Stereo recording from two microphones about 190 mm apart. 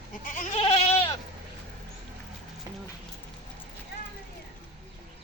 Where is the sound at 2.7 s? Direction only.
20° right (ahead or behind).